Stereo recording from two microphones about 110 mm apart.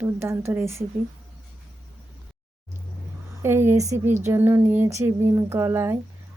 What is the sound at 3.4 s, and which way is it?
A woman's voice, 20° right (ahead or behind).